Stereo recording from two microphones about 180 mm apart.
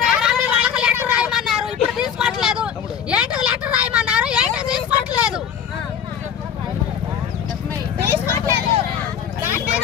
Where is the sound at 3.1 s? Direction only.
5° right (ahead or behind).